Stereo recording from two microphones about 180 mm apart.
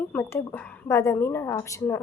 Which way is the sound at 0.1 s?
10° left (ahead or behind).